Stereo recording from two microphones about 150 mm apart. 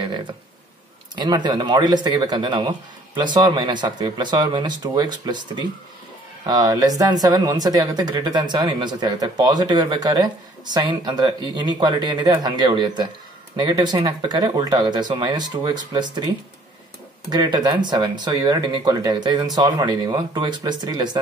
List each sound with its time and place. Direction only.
1.1 s speech: 30° right (ahead or behind)
17.3 s speech: 30° right (ahead or behind)